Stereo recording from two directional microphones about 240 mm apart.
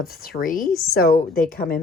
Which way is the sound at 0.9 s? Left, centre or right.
Left.